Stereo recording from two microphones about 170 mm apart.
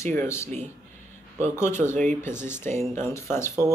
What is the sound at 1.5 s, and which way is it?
Speech, 15° left (ahead or behind).